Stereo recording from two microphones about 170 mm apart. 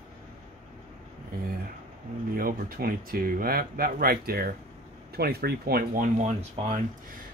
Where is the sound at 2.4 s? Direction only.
60° right (ahead or behind); by 6.8 s 45° right (ahead or behind).